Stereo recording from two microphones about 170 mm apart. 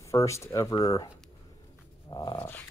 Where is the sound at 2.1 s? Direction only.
25° left (ahead or behind).